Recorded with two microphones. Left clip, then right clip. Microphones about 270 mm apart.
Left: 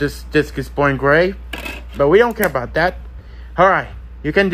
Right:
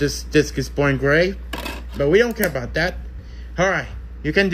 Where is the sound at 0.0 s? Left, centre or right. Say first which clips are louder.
Left 1 dB; centre.